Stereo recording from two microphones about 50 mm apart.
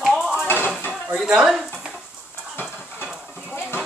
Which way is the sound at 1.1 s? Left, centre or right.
Centre.